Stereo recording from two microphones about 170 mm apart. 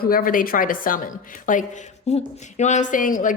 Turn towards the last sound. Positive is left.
turn(degrees=50)  # may be behind; listen again after turning